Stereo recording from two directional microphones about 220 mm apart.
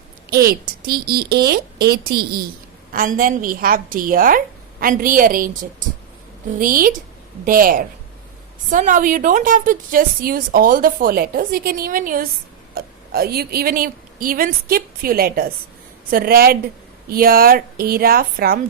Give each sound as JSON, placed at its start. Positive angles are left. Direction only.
{"t": 0.9, "sound": "a woman's voice", "side_deg": -45}
{"t": 6.6, "sound": "a woman's voice", "side_deg": -40}